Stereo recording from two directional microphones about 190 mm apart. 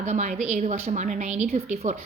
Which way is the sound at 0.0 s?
40° right (ahead or behind).